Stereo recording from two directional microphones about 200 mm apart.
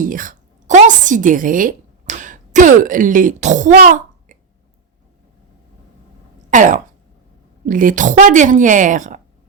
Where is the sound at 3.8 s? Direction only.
40° right (ahead or behind).